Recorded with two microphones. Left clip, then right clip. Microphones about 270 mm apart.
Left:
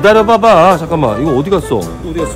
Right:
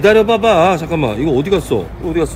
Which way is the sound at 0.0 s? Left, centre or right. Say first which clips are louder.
Left 3 dB; centre.